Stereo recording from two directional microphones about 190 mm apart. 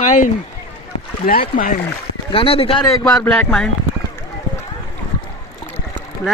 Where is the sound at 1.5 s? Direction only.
45° left (ahead or behind).